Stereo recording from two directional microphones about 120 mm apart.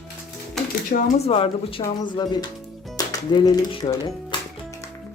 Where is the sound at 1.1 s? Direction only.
55° left (ahead or behind).